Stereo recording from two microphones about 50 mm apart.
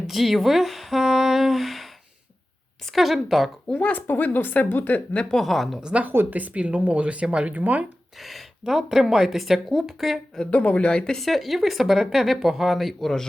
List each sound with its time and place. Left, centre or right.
0.1 s speech: centre
3.7 s speech: left
5.3 s speech: centre
6.3 s speech: right
8.2 s speech: centre
10.5 s speech: left
11.0 s speech: centre
11.3 s speech: centre